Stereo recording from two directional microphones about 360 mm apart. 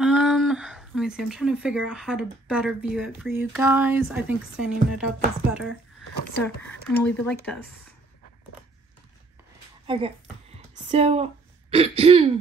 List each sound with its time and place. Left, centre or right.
0.0 s speech: centre
9.8 s a sound: centre
11.7 s throat clearing: centre